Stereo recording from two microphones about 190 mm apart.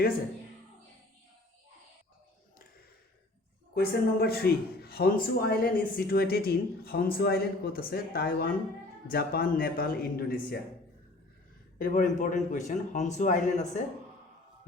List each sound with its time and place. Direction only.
3.8 s speech: 55° left (ahead or behind)
11.8 s a man's voice: 45° left (ahead or behind)